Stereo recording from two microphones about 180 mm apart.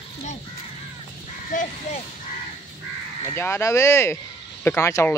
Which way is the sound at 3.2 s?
15° left (ahead or behind).